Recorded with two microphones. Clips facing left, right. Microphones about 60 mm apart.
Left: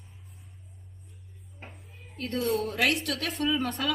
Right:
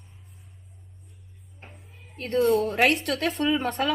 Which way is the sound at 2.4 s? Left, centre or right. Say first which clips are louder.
Right 5 dB; right.